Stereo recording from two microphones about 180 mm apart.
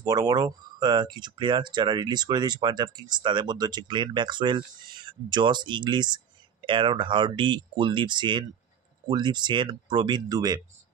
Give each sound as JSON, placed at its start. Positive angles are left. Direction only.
{"t": 0.0, "sound": "speech", "side_deg": -20}